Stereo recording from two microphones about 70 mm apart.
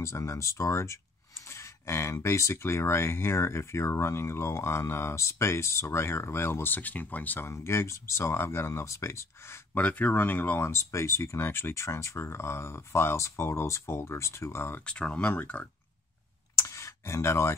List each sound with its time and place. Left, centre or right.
0.0 s speech: left
7.4 s speech: left
9.8 s speech: left
10.7 s speech: left
14.9 s speech: centre
16.5 s clicking: left